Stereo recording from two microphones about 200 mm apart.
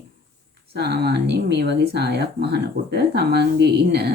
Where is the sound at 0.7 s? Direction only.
55° right (ahead or behind).